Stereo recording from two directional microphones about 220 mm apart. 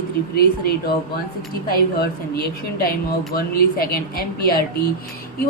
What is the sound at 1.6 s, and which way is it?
A woman's voice, 45° left (ahead or behind).